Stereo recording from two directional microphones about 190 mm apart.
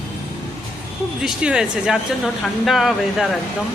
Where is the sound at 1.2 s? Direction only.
5° right (ahead or behind).